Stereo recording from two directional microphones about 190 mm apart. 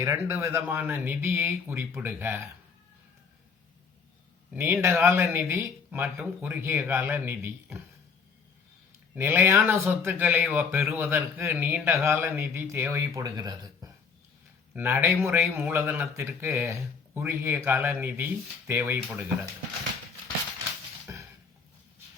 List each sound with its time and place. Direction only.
0.0 s speech: 15° right (ahead or behind)
4.5 s speech: 10° right (ahead or behind)
9.1 s speech: 10° right (ahead or behind)
21.1 s a sound: 15° right (ahead or behind)